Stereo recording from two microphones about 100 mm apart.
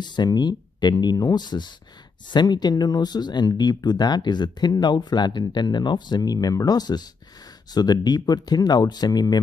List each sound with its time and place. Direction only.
0.0 s speech: 45° left (ahead or behind)